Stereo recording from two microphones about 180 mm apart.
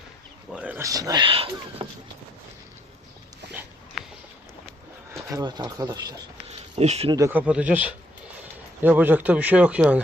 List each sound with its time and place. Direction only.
0.5 s speech: 10° right (ahead or behind)
0.9 s speech: 20° right (ahead or behind)
4.0 s boat: centre (ahead or behind)
5.3 s speech: 20° right (ahead or behind)
6.5 s a sound: 35° right (ahead or behind)
7.1 s speech: 15° right (ahead or behind)